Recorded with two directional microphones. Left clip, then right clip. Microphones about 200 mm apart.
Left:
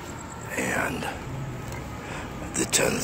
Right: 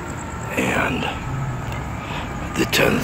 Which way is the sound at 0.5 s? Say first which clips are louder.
Right 6 dB; 10° left (ahead or behind).